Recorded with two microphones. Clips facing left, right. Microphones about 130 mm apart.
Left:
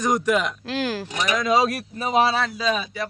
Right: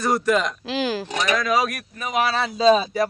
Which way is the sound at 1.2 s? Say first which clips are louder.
Left 2 dB; 20° left (ahead or behind).